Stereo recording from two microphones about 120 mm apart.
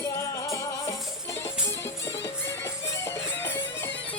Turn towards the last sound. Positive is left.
turn(degrees=20)  # may be behind; listen again after turning